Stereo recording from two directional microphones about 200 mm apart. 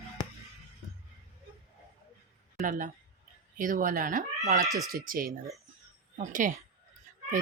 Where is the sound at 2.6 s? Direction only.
40° right (ahead or behind).